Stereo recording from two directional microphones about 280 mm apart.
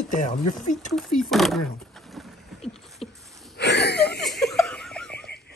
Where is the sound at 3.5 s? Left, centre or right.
Left.